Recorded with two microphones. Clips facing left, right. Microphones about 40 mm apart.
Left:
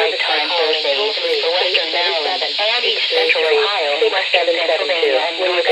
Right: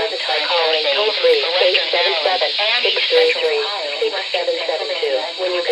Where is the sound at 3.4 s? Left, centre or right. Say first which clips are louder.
Left 4 dB; left.